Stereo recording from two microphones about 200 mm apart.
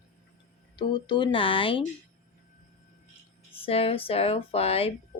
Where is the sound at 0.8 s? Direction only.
20° left (ahead or behind).